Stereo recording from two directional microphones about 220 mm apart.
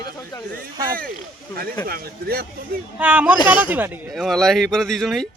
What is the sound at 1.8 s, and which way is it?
Speech, 45° right (ahead or behind).